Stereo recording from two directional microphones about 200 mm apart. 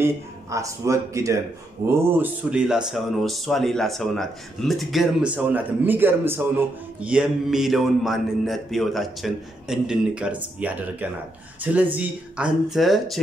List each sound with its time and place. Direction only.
0.0 s a man's voice: 15° right (ahead or behind); by 13.2 s centre (ahead or behind)